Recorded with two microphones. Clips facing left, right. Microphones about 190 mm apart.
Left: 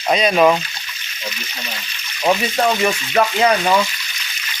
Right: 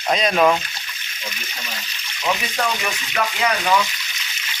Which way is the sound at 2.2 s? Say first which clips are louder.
Left 6 dB; 40° left (ahead or behind).